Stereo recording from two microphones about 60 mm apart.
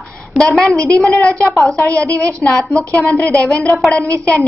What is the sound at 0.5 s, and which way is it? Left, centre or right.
Speech, centre.